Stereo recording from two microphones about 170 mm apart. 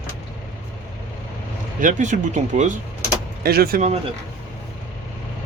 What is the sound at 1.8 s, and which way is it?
Speech, 50° right (ahead or behind).